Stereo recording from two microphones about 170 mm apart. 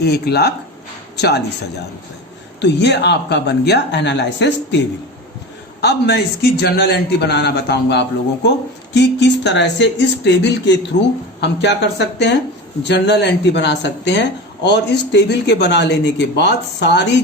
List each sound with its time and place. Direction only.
0.0 s a man's voice: 75° left (ahead or behind)
2.6 s speech: 90° left
5.8 s a man's voice: 75° left (ahead or behind)